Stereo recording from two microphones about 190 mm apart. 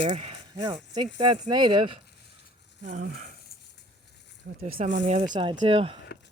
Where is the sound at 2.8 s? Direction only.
45° right (ahead or behind).